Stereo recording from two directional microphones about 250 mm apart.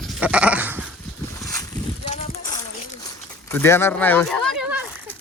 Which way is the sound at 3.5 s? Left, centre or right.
Centre.